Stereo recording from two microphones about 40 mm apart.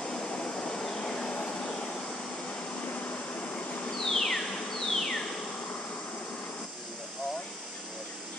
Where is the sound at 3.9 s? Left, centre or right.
Centre.